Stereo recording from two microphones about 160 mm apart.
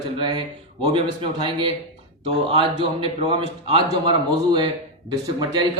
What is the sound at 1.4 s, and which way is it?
Speech, 30° right (ahead or behind).